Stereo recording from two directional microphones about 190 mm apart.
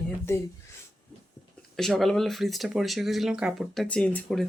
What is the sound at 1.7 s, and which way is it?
Speech, centre (ahead or behind).